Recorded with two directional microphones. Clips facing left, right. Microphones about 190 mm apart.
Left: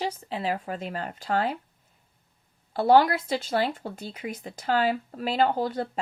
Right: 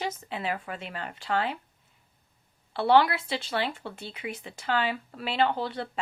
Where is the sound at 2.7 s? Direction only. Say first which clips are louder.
Left 2 dB; 40° left (ahead or behind).